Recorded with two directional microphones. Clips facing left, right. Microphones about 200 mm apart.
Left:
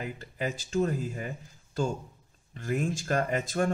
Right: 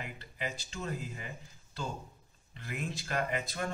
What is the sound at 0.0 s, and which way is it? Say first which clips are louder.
Speech: left 7 dB; 45° left (ahead or behind).